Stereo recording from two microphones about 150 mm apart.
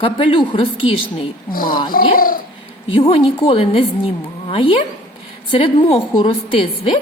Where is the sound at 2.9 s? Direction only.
35° left (ahead or behind).